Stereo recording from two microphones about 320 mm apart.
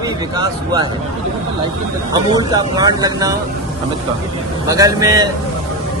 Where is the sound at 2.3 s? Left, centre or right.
Centre.